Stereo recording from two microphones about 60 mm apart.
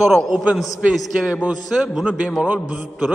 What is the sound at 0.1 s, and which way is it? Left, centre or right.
Speech, centre.